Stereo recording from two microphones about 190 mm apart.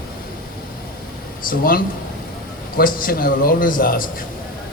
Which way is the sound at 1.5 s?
50° left (ahead or behind).